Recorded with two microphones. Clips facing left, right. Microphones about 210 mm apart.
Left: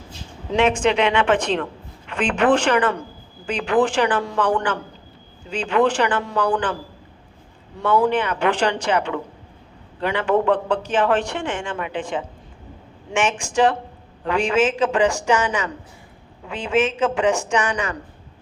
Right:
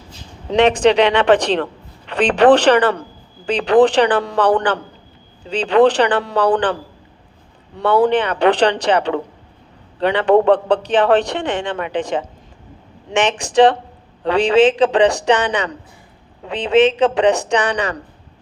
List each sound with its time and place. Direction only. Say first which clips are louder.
0.5 s a man's voice: right 5 dB; 35° right (ahead or behind)
7.8 s a man's voice: right 4 dB; 35° right (ahead or behind)
11.9 s speech: right 6 dB; 80° right
13.1 s a man's voice: right 6 dB; 35° right (ahead or behind)